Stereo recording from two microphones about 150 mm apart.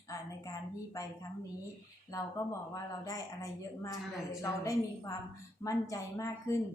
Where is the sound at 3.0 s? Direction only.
20° left (ahead or behind).